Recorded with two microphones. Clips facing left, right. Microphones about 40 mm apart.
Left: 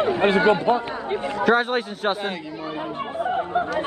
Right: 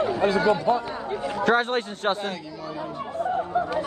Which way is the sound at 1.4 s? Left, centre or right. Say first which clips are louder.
Left 2 dB; centre.